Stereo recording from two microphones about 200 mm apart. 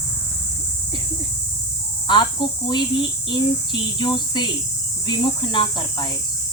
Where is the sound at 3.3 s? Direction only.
25° left (ahead or behind).